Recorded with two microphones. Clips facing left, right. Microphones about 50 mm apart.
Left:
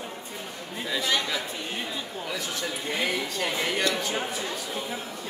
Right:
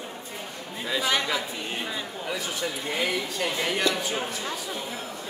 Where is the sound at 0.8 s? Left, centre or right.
Centre.